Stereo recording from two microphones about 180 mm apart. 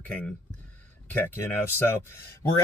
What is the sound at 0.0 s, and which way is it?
Speech, 10° left (ahead or behind).